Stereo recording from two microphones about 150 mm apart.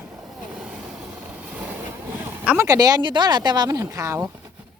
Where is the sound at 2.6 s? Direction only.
25° right (ahead or behind).